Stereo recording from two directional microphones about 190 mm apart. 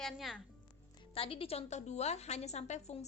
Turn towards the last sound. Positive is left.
turn(degrees=35)  # may be behind; listen again after turning